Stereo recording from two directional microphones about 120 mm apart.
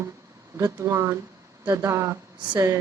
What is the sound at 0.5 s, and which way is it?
Speech, 25° right (ahead or behind).